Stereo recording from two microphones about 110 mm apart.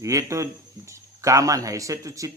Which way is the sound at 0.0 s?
30° right (ahead or behind).